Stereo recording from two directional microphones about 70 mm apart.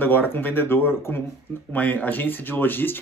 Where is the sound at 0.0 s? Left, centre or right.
Left.